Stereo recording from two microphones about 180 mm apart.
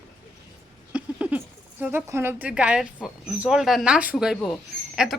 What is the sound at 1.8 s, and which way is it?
Speech, 10° right (ahead or behind).